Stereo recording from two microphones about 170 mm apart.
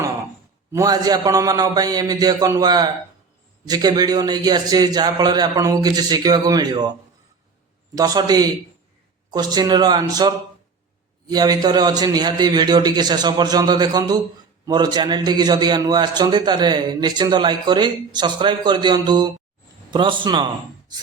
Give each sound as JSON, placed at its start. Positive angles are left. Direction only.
{"t": 0.7, "sound": "a man's voice", "side_deg": -20}
{"t": 7.9, "sound": "a man's voice", "side_deg": -20}